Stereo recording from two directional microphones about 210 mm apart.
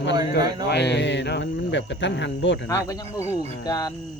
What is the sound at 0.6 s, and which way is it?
Speech, 55° left (ahead or behind).